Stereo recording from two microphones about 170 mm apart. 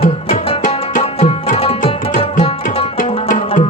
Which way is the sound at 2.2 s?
30° left (ahead or behind).